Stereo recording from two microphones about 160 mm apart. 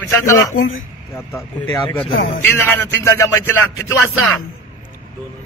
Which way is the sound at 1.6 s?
20° left (ahead or behind).